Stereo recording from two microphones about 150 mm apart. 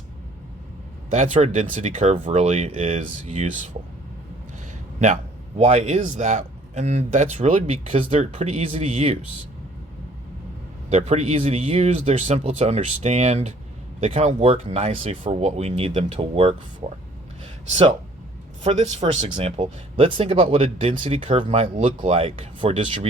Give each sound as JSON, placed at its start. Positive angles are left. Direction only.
{"t": 1.1, "sound": "speech", "side_deg": -45}
{"t": 4.9, "sound": "a man's voice", "side_deg": -50}
{"t": 10.8, "sound": "speech", "side_deg": -45}
{"t": 18.6, "sound": "speech", "side_deg": -50}